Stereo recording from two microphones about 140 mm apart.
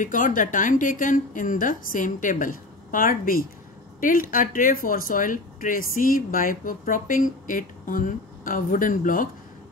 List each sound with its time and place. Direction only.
0.0 s speech: 75° left (ahead or behind)
4.0 s speech: 80° left